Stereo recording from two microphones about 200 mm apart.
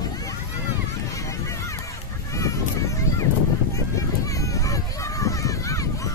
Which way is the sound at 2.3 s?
15° left (ahead or behind).